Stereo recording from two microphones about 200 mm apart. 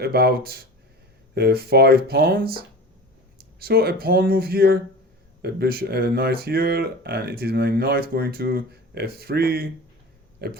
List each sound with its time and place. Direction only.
0.0 s speech: 55° right (ahead or behind)